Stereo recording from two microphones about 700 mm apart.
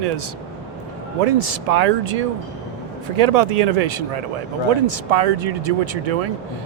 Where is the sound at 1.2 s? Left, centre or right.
Right.